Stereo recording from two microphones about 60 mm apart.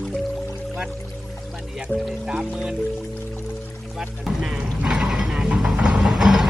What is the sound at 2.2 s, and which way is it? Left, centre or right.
Speech, centre.